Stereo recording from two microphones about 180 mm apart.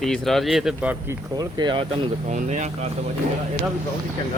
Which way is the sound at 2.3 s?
40° right (ahead or behind).